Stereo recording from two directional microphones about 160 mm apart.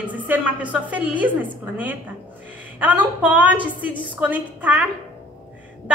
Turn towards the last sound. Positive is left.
turn(degrees=-10)  # may be behind; listen again after turning